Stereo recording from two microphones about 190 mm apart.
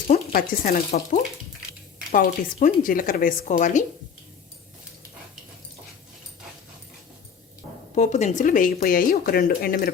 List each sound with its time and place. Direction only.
0.1 s speech: 45° left (ahead or behind)
7.9 s speech: 40° left (ahead or behind)